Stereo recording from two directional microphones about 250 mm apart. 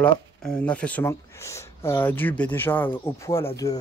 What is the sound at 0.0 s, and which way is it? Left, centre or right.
Speech, centre.